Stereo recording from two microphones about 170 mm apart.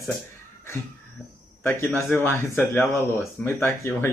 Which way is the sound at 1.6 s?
15° left (ahead or behind).